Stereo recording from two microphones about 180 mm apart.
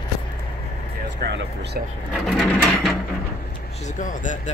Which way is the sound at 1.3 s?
70° right (ahead or behind).